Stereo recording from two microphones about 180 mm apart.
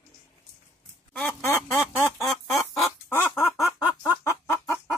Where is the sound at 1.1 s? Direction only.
10° left (ahead or behind).